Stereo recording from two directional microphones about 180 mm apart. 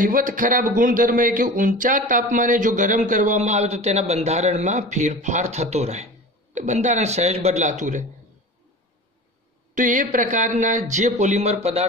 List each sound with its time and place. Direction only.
0.0 s speech: 50° right (ahead or behind)
9.8 s speech: 45° right (ahead or behind)